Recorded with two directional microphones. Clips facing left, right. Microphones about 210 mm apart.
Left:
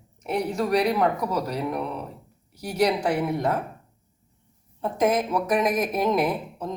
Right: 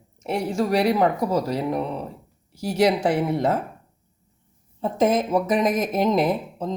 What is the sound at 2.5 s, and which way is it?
Speech, 25° right (ahead or behind).